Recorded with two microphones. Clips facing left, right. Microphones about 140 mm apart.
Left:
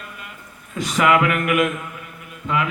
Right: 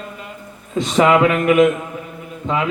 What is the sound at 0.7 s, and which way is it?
A man's voice, 25° right (ahead or behind).